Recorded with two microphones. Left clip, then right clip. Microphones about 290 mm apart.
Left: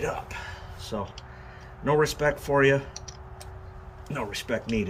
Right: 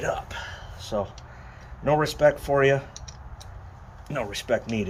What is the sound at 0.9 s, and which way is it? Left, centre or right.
Speech, centre.